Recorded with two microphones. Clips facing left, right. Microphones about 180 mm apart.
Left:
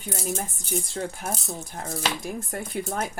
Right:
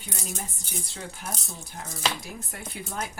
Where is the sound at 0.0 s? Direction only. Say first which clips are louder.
Left 7 dB; 50° left (ahead or behind).